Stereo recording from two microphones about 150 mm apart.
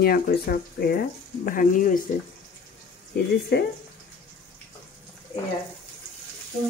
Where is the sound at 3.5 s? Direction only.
90° left.